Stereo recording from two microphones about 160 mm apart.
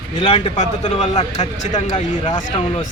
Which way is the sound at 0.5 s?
45° left (ahead or behind).